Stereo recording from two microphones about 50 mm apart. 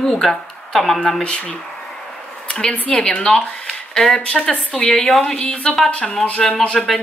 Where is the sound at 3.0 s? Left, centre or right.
Centre.